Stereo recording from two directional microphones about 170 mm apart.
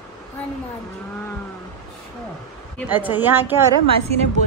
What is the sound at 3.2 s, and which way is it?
Speech, 10° right (ahead or behind).